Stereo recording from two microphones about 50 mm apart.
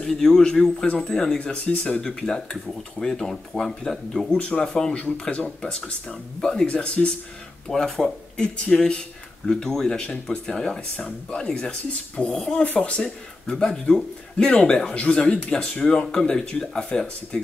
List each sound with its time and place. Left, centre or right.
0.0 s speech: centre
1.7 s speech: left
5.3 s speech: left
7.6 s speech: centre